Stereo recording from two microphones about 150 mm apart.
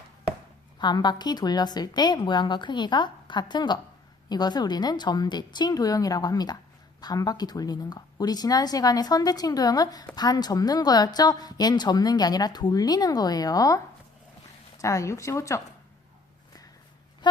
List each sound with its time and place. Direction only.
0.8 s a woman's voice: 30° left (ahead or behind)